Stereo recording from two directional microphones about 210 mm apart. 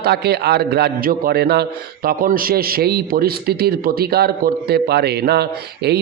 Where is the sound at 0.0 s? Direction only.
50° right (ahead or behind).